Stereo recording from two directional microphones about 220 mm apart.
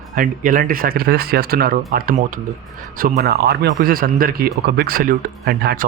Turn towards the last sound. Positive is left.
turn(degrees=-45)  # may be behind; listen again after turning